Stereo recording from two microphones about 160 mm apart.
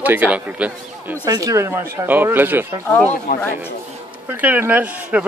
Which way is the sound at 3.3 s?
60° left (ahead or behind).